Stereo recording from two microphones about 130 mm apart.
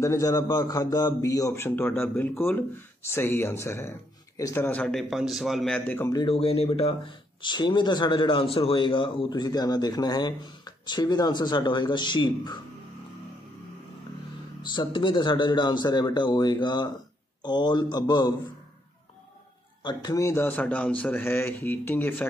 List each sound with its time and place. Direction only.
0.0 s a man's voice: 25° left (ahead or behind)
4.6 s a man's voice: 10° left (ahead or behind)
4.9 s a man's voice: centre (ahead or behind)
5.9 s a man's voice: 15° left (ahead or behind)
6.2 s speech: 50° left (ahead or behind)
14.6 s speech: 35° left (ahead or behind)
19.8 s a man's voice: 30° left (ahead or behind); by 22.2 s 15° left (ahead or behind)